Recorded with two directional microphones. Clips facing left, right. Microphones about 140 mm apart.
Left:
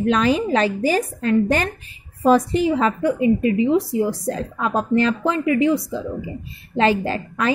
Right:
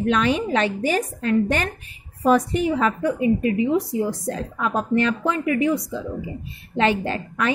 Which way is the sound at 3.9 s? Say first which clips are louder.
Left 3 dB; 35° left (ahead or behind).